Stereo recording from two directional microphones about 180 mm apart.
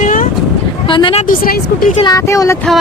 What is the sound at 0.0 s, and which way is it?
Vehicle, 50° left (ahead or behind).